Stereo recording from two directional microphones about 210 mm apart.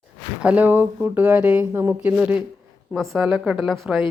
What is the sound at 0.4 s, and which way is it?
Speech, 5° right (ahead or behind).